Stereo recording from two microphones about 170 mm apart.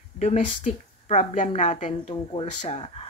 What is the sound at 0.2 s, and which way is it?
A woman's voice, 40° left (ahead or behind).